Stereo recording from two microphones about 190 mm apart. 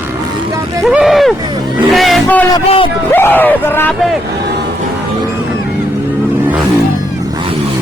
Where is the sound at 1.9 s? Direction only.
Centre (ahead or behind).